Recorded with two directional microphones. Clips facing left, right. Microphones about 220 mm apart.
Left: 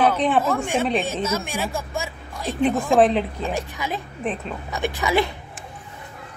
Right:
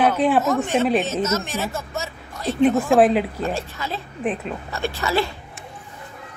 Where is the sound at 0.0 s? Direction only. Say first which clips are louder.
Right 1 dB; 5° right (ahead or behind).